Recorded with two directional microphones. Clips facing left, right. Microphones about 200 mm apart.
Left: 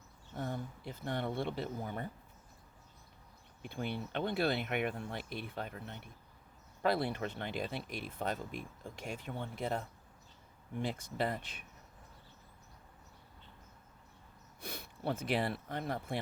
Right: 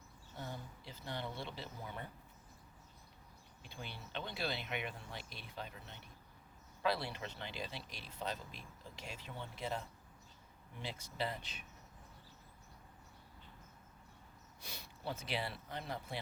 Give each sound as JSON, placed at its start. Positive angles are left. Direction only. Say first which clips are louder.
{"t": 0.3, "sound": "speech", "louder": "left 8 dB", "side_deg": 55}
{"t": 3.6, "sound": "speech", "louder": "left 12 dB", "side_deg": 55}
{"t": 14.6, "sound": "speech", "louder": "left 7 dB", "side_deg": 55}